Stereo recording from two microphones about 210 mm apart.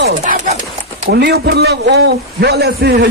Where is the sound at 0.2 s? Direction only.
30° right (ahead or behind).